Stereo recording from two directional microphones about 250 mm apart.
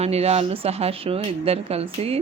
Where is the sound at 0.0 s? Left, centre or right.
Right.